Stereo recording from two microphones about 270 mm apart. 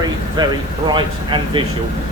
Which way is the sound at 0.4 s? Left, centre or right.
Centre.